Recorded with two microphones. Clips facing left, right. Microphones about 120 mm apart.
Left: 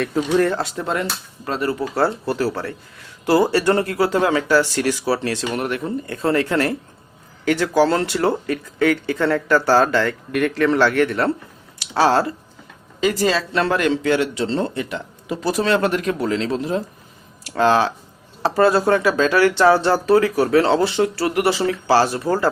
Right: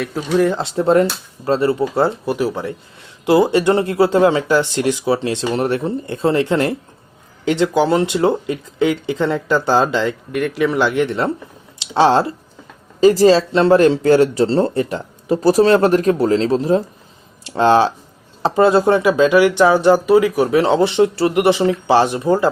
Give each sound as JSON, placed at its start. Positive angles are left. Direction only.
{"t": 0.0, "sound": "speech", "side_deg": -5}
{"t": 0.5, "sound": "speech", "side_deg": -30}
{"t": 2.2, "sound": "speech", "side_deg": -15}
{"t": 13.0, "sound": "speech", "side_deg": -35}